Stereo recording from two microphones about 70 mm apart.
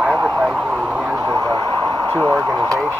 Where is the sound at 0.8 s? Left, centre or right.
Centre.